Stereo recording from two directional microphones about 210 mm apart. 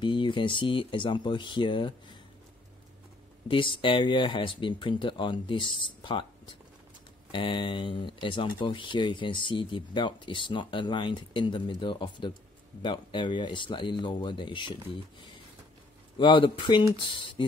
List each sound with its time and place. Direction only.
0.0 s speech: 25° left (ahead or behind)
3.4 s speech: 25° left (ahead or behind)
7.2 s speech: 25° left (ahead or behind)